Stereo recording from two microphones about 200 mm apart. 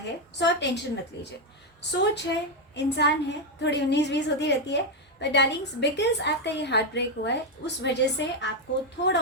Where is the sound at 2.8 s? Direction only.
60° left (ahead or behind).